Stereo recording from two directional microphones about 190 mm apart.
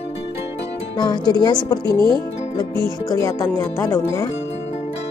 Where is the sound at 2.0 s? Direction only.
25° right (ahead or behind).